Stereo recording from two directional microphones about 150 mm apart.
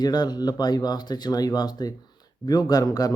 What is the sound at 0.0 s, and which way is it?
Speech, 25° left (ahead or behind).